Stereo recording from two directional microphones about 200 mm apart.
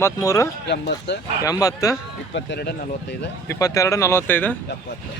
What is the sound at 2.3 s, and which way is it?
Speech, 65° left (ahead or behind).